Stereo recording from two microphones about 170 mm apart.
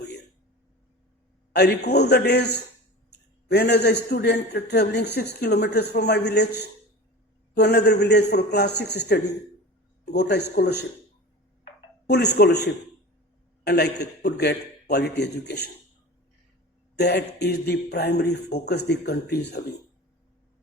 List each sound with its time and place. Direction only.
1.5 s a man's voice: 75° left (ahead or behind)
12.0 s a man's voice: 80° left
16.9 s a man's voice: 75° left (ahead or behind)